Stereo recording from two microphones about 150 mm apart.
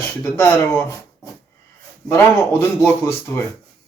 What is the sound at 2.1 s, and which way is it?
Speech, 15° left (ahead or behind).